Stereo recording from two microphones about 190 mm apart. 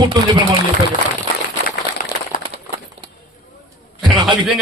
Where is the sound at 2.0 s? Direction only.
45° left (ahead or behind).